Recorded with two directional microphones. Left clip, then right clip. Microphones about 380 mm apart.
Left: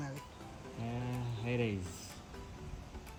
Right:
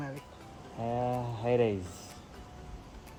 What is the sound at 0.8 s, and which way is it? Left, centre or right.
Speech, right.